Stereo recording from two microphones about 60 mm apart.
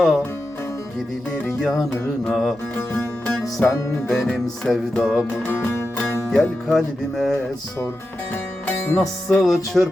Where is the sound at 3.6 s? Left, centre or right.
Left.